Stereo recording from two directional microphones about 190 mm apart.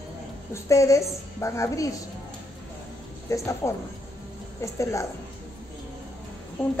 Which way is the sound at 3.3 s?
15° left (ahead or behind).